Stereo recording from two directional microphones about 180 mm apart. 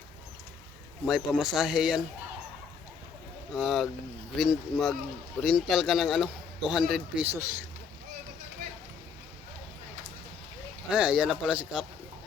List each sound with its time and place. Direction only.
1.0 s speech: centre (ahead or behind)
3.5 s speech: centre (ahead or behind)
8.6 s a sound: 55° right (ahead or behind)
10.8 s speech: 5° right (ahead or behind)